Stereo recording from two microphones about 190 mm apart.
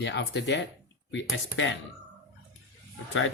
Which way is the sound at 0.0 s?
70° left (ahead or behind).